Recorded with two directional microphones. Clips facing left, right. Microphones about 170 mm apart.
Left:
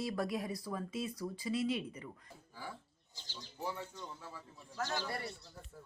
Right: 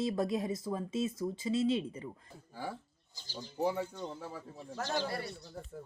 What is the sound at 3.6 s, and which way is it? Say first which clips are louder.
Speech: right 9 dB; 50° right (ahead or behind).